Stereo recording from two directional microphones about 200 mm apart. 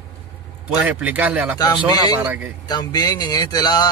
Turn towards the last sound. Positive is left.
turn(degrees=20)  # may be behind; listen again after turning